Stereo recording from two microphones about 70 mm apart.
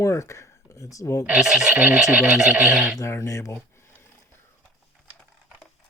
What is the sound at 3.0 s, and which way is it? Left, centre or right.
Speech, left.